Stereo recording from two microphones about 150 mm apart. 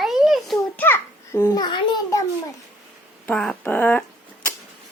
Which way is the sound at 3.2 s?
5° left (ahead or behind).